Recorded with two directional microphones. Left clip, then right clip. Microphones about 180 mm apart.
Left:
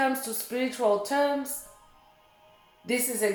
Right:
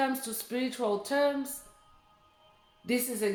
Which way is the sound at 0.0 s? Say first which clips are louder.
Left 4 dB; 35° right (ahead or behind).